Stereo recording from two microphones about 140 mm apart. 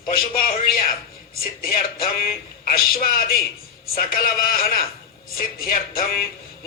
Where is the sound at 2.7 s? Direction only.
90° left.